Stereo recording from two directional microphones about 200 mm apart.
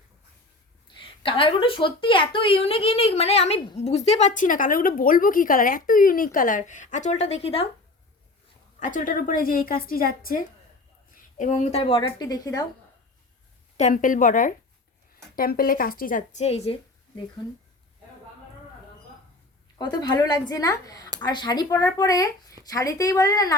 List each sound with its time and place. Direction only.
0.9 s a woman's voice: 25° left (ahead or behind)
8.8 s a woman's voice: 40° left (ahead or behind); by 12.6 s 20° left (ahead or behind)
13.7 s a woman's voice: 40° left (ahead or behind)
19.8 s a woman's voice: 20° left (ahead or behind)